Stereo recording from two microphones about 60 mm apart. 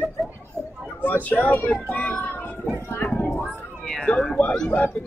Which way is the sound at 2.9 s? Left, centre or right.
Left.